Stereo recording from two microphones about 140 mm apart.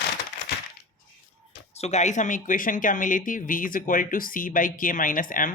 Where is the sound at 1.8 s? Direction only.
55° left (ahead or behind); by 5.5 s 75° left (ahead or behind).